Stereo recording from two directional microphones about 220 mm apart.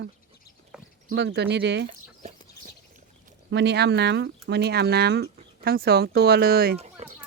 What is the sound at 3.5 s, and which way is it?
Speech, 50° right (ahead or behind).